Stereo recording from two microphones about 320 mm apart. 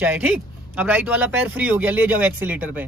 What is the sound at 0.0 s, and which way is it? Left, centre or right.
Speech, centre.